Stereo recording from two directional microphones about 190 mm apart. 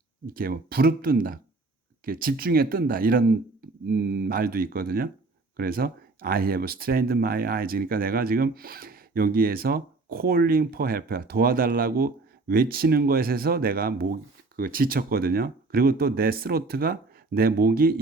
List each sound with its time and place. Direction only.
0.3 s speech: 50° right (ahead or behind)